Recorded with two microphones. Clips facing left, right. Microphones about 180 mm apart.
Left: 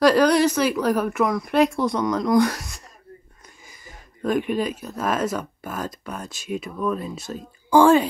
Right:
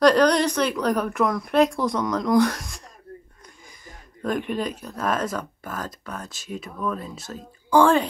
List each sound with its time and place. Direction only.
0.0 s speech: 5° left (ahead or behind)